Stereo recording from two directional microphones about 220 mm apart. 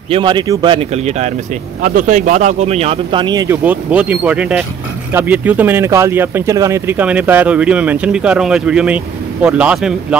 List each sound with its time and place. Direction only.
0.1 s speech: 20° right (ahead or behind); by 9.9 s 5° right (ahead or behind)